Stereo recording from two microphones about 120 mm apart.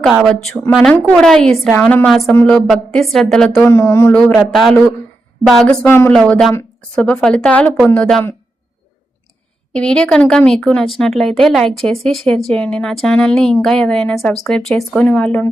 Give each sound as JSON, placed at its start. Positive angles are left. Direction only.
{"t": 0.0, "sound": "speech", "side_deg": 0}
{"t": 2.3, "sound": "speech", "side_deg": 10}
{"t": 2.6, "sound": "speech", "side_deg": 0}
{"t": 3.7, "sound": "speech", "side_deg": 20}
{"t": 4.5, "sound": "speech", "side_deg": 0}
{"t": 5.8, "sound": "speech", "side_deg": 20}
{"t": 6.1, "sound": "speech", "side_deg": 5}
{"t": 9.7, "sound": "speech", "side_deg": 10}